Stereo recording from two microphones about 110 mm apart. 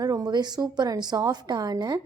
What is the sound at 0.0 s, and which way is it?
A woman's voice, 35° right (ahead or behind).